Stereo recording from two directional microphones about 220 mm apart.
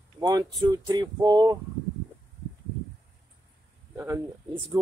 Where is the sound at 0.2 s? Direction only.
20° right (ahead or behind).